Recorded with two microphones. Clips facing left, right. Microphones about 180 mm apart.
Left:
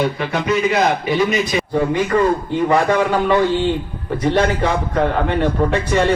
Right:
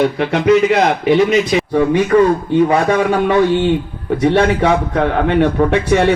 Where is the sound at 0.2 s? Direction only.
65° right (ahead or behind).